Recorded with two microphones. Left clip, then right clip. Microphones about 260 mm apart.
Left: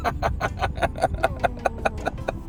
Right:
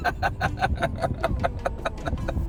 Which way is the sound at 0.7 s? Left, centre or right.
Left.